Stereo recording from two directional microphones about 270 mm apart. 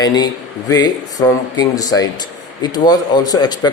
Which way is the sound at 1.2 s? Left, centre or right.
Centre.